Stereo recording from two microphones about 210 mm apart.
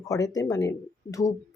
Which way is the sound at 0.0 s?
15° left (ahead or behind).